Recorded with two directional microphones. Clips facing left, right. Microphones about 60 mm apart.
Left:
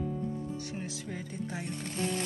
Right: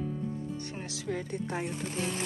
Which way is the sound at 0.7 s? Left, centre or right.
Right.